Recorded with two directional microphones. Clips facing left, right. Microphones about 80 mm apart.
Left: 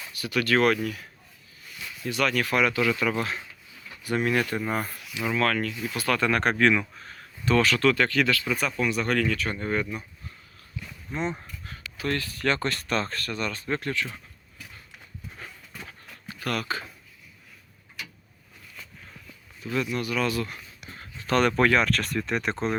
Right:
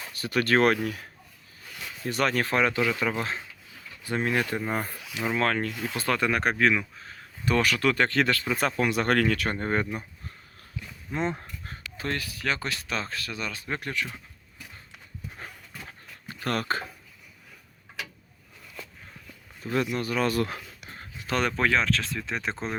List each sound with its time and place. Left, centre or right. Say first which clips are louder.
0.0 s speech: right 1 dB; right
2.0 s speech: even; right; by 7.3 s centre
7.4 s speech: left 3 dB; centre
7.9 s speech: even; right
8.8 s speech: right 2 dB; right
11.1 s speech: right 1 dB; right
11.7 s a sound: left 3 dB; right
12.1 s speech: left 4 dB; centre
13.7 s speech: left 1 dB; centre
15.9 s a sound: even; right
19.6 s speech: right 1 dB; right
21.2 s speech: left 4 dB; centre